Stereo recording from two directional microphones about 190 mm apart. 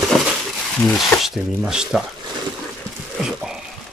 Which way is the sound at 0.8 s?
Centre (ahead or behind).